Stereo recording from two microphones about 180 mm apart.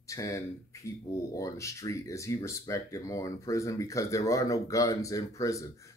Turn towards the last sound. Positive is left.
turn(degrees=20)  # may be behind; listen again after turning